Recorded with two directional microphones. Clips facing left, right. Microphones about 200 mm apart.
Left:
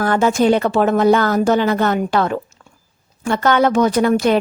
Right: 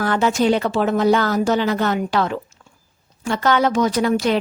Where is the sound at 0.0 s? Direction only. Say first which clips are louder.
Left 3 dB; 50° left (ahead or behind).